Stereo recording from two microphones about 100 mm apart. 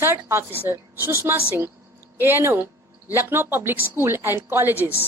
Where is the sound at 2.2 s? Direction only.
25° right (ahead or behind).